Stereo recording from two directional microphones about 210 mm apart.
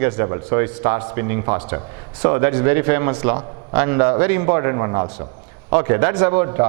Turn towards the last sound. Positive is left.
turn(degrees=-15)  # may be behind; listen again after turning